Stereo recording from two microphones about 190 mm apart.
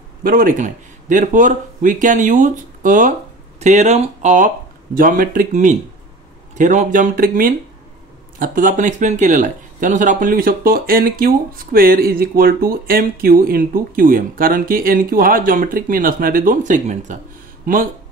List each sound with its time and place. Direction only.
0.2 s speech: 50° right (ahead or behind)